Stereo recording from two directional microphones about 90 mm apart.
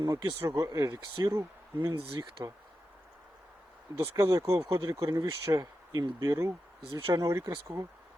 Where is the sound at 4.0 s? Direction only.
25° right (ahead or behind); by 6.0 s 45° right (ahead or behind).